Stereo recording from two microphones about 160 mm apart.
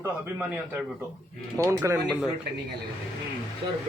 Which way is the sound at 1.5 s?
15° right (ahead or behind).